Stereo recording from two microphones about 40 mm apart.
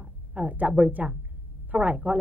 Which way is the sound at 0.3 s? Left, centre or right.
Right.